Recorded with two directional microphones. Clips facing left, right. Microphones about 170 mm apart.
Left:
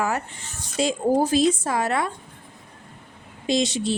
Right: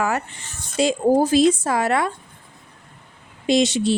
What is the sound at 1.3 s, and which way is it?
Speech, 90° right.